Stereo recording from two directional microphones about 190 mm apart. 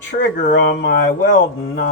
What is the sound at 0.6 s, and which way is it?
Speech, 60° left (ahead or behind).